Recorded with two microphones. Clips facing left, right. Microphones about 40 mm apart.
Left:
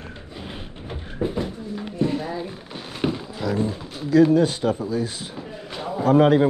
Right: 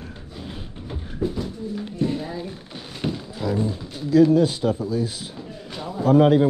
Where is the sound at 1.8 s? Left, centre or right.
Centre.